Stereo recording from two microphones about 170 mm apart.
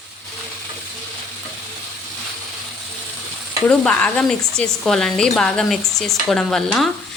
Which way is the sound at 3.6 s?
10° left (ahead or behind).